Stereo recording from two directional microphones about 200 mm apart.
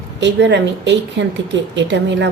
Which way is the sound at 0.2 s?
60° right (ahead or behind).